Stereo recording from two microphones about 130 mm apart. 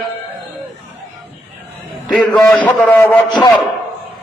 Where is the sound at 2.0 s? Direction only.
10° left (ahead or behind).